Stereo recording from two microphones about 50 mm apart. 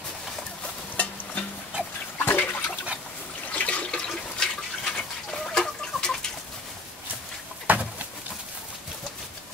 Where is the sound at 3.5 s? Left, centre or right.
Left.